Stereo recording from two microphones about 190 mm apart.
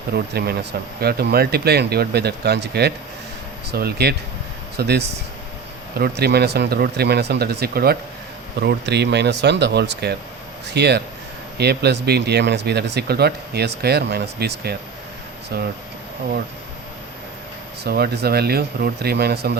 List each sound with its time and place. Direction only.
0.1 s speech: 60° right (ahead or behind)
17.8 s speech: 55° right (ahead or behind)